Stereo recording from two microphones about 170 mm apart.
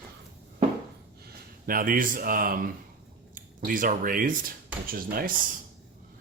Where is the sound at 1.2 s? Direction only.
55° right (ahead or behind).